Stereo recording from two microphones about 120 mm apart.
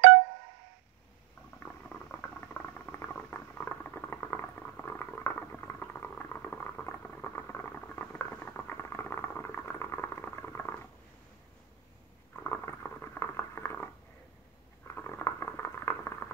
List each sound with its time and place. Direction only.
1.6 s a sound: 15° left (ahead or behind)
12.4 s rodents: 15° left (ahead or behind)
15.0 s boiling: 20° left (ahead or behind)